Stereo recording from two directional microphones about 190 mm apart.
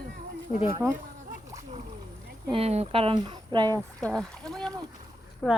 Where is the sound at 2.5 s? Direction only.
35° right (ahead or behind).